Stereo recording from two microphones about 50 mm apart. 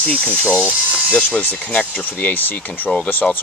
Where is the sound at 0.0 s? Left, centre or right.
Left.